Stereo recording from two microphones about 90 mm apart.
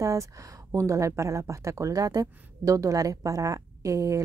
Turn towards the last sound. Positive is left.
turn(degrees=-35)  # may be behind; listen again after turning